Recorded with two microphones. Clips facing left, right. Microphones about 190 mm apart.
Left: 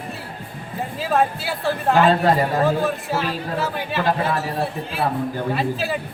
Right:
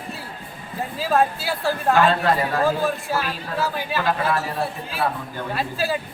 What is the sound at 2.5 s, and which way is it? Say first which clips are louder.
Speech: left 2 dB; 20° left (ahead or behind).